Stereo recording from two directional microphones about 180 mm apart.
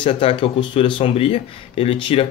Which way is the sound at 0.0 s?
30° left (ahead or behind).